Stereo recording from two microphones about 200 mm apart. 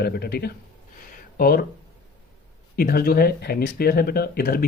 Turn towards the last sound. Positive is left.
turn(degrees=50)  # may be behind; listen again after turning